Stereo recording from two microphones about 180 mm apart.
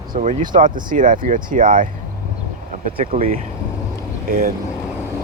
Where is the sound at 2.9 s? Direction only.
45° right (ahead or behind).